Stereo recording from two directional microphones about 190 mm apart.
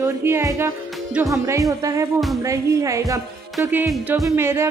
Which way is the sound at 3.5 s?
5° right (ahead or behind).